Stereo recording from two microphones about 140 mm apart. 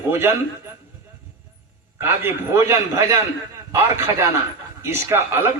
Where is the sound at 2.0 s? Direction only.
15° right (ahead or behind).